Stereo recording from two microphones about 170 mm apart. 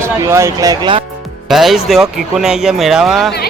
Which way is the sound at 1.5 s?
Centre (ahead or behind).